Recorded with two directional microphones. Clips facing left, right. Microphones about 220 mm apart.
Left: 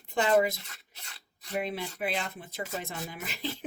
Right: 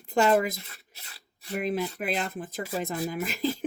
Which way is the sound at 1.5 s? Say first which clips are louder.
Right 4 dB; 45° right (ahead or behind).